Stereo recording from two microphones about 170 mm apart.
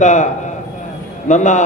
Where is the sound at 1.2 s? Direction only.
45° left (ahead or behind).